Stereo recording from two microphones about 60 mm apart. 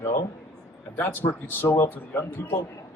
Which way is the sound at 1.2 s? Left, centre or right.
Left.